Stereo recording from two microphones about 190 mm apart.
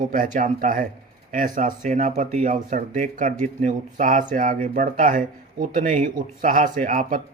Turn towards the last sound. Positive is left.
turn(degrees=-45)  # may be behind; listen again after turning